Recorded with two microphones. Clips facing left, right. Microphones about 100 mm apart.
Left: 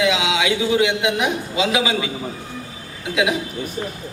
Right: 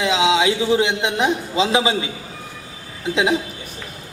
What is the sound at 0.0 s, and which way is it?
A man's voice, 30° right (ahead or behind).